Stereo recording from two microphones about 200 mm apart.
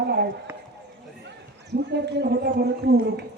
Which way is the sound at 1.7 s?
55° right (ahead or behind).